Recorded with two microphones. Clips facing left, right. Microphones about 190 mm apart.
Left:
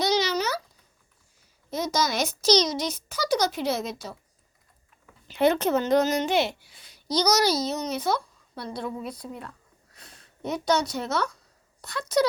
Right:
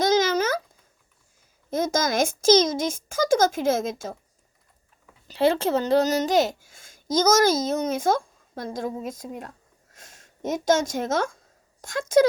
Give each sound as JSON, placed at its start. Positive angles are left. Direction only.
{"t": 0.0, "sound": "a sound", "side_deg": -50}
{"t": 1.7, "sound": "a child's voice", "side_deg": -50}
{"t": 5.3, "sound": "a woman's voice", "side_deg": -30}